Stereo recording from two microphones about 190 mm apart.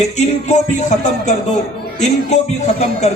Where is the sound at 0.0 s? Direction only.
40° left (ahead or behind).